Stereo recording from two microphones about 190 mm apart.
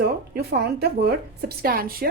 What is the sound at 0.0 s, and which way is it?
A woman's voice, 60° right (ahead or behind).